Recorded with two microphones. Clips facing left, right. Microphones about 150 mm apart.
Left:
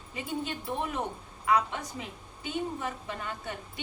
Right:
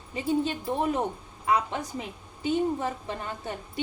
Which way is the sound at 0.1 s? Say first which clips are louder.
Right 8 dB; 30° right (ahead or behind).